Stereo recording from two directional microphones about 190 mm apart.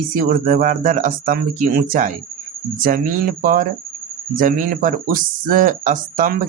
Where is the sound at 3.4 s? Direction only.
45° right (ahead or behind).